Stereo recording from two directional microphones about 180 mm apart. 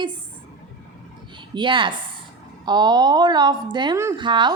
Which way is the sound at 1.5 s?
25° right (ahead or behind).